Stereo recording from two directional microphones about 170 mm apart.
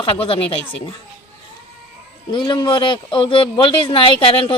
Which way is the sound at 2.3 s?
25° left (ahead or behind).